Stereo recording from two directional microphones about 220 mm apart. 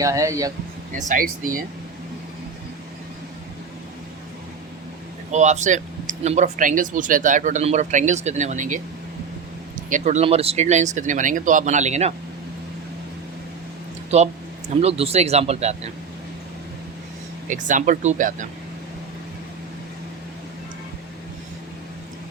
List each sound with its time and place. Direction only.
0.0 s speech: 15° right (ahead or behind)
0.9 s speech: 35° right (ahead or behind)
5.3 s speech: 30° right (ahead or behind)
9.9 s speech: 30° right (ahead or behind)
14.1 s a man's voice: 30° right (ahead or behind)
17.5 s speech: 35° right (ahead or behind)